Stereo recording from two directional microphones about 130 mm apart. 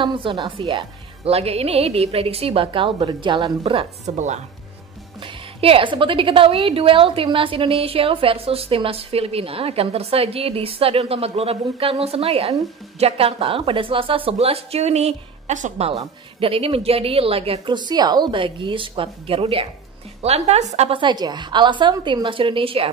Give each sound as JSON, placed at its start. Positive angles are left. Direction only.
{"t": 0.0, "sound": "a woman's voice", "side_deg": -40}
{"t": 4.0, "sound": "speech", "side_deg": -60}
{"t": 5.2, "sound": "a woman's voice", "side_deg": -45}
{"t": 16.0, "sound": "a woman's voice", "side_deg": -45}
{"t": 17.7, "sound": "a woman's voice", "side_deg": -30}
{"t": 20.9, "sound": "a woman's voice", "side_deg": -35}